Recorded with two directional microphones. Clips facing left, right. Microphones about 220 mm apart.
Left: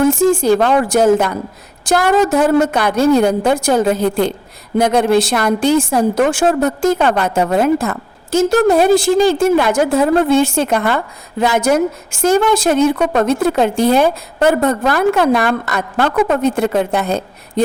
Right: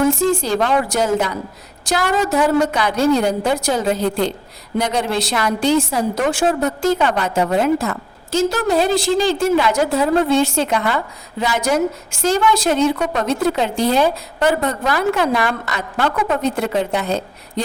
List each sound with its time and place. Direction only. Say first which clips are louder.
0.1 s a woman's voice: left 5 dB; 50° left (ahead or behind)